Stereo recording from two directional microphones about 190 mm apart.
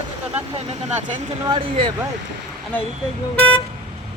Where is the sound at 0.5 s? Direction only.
30° right (ahead or behind).